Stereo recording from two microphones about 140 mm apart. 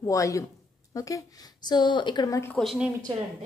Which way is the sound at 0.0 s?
25° left (ahead or behind).